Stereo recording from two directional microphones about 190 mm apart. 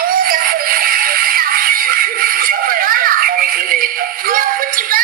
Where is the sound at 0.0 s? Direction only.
50° right (ahead or behind).